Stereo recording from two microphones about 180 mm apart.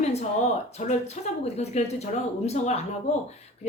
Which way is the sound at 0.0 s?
35° left (ahead or behind).